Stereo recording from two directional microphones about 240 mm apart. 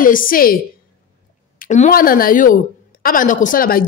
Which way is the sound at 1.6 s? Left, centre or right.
Left.